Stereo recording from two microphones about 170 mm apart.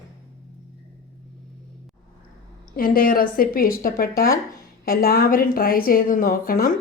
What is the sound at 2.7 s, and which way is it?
A woman's voice, 60° left (ahead or behind).